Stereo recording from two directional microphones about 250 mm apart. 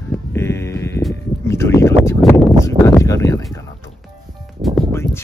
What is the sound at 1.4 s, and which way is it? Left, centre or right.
Speech, centre.